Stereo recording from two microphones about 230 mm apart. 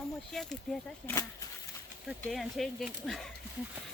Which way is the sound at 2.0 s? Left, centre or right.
Centre.